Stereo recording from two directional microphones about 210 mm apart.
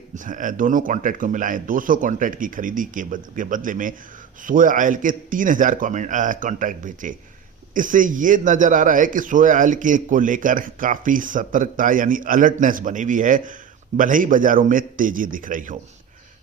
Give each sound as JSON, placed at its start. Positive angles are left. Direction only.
{"t": 0.2, "sound": "a man's voice", "side_deg": -40}